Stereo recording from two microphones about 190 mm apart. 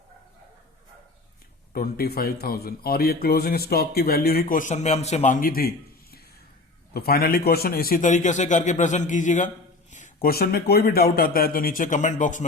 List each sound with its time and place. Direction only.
1.7 s a man's voice: 55° left (ahead or behind)